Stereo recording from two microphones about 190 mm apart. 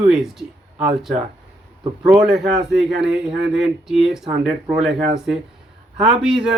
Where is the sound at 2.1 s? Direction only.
Centre (ahead or behind).